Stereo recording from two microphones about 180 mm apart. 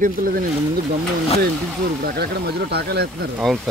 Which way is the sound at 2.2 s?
65° right (ahead or behind).